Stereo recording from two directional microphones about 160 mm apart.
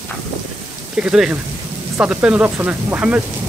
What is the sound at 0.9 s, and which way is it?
Speech, 5° right (ahead or behind).